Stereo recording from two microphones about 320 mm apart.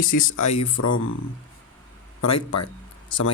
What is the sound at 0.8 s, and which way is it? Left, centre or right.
Speech, left.